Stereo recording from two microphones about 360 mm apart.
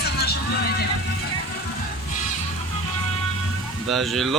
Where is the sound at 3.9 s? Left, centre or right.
Centre.